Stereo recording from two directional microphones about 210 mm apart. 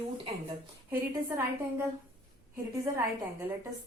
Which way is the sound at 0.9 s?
10° right (ahead or behind).